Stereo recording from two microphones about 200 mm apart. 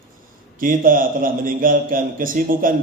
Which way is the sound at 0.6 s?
45° right (ahead or behind).